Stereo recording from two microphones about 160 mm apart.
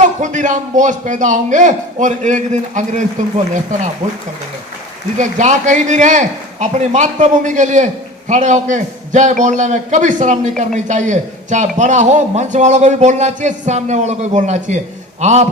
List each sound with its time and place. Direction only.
0.0 s a man's voice: 50° right (ahead or behind)
5.1 s a man's voice: 50° right (ahead or behind)